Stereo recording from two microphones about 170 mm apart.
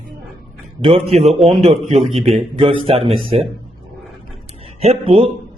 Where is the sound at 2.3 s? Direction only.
35° right (ahead or behind).